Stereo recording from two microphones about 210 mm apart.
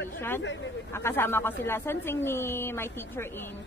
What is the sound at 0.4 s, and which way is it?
Speech, 60° left (ahead or behind).